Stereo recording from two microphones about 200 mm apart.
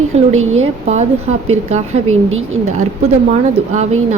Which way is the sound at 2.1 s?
85° right.